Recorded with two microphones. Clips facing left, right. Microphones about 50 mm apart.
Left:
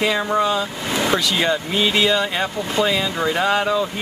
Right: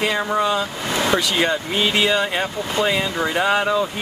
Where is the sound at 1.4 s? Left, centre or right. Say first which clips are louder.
Even; centre.